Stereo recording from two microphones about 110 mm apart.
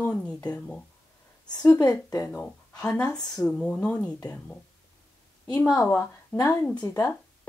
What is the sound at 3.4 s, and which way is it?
Speech, 10° left (ahead or behind).